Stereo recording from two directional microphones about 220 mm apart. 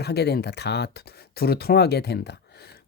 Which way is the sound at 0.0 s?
50° left (ahead or behind).